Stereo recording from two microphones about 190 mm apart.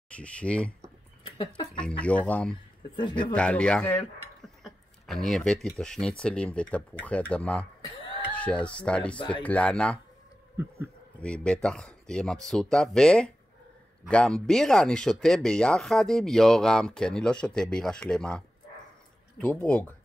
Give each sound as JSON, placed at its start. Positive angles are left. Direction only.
{"t": 0.1, "sound": "speech", "side_deg": 5}
{"t": 1.2, "sound": "speech", "side_deg": 20}
{"t": 2.0, "sound": "speech", "side_deg": 5}
{"t": 3.0, "sound": "speech", "side_deg": 25}
{"t": 3.3, "sound": "speech", "side_deg": 5}
{"t": 11.1, "sound": "speech", "side_deg": 5}